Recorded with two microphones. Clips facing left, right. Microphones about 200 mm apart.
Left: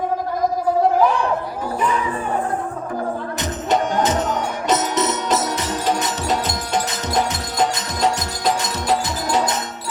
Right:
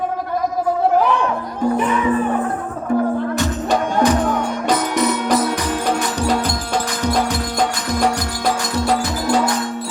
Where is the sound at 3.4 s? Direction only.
20° left (ahead or behind).